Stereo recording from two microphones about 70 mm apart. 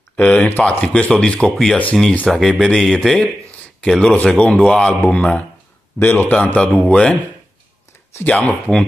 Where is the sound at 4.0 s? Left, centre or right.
Centre.